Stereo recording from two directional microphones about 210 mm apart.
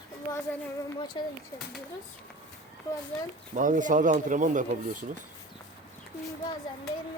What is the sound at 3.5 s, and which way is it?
Speech, 35° right (ahead or behind).